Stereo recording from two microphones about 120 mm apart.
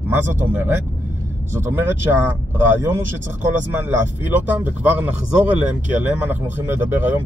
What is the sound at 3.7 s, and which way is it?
Speech, 20° right (ahead or behind).